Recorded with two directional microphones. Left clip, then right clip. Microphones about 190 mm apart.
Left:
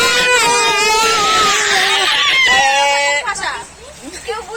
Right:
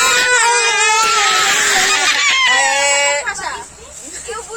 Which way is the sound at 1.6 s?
60° right (ahead or behind).